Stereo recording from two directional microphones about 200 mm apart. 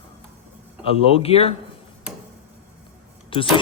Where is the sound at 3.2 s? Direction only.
25° left (ahead or behind).